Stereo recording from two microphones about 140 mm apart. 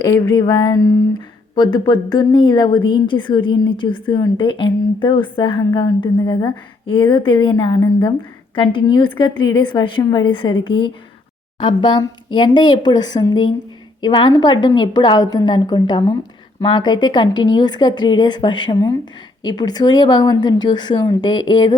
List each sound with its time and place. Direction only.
0.0 s a woman's voice: 30° left (ahead or behind)